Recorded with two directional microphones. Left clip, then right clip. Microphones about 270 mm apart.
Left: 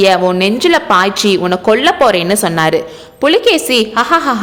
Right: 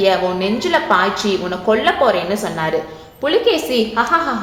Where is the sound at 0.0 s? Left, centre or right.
Left.